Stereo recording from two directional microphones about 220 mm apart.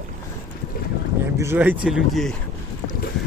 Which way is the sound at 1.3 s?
10° right (ahead or behind).